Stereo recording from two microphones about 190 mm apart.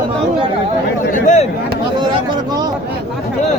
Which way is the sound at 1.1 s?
40° left (ahead or behind).